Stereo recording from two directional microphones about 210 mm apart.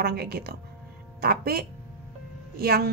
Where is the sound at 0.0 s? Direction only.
45° right (ahead or behind).